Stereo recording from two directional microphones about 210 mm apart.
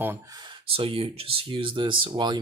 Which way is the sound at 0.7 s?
25° right (ahead or behind).